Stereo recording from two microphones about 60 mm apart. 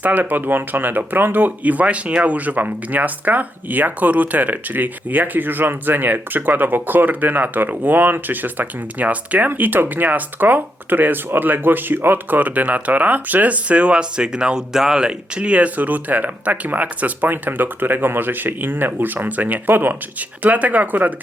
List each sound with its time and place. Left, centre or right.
0.0 s speech: right